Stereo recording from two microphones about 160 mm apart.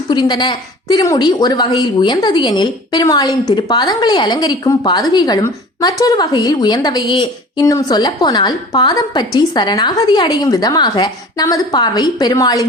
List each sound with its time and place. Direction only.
0.1 s a woman's voice: 25° left (ahead or behind)